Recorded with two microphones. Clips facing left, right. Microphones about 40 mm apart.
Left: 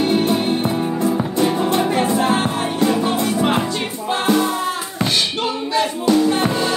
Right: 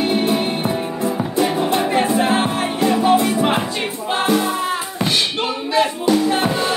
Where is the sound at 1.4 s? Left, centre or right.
Right.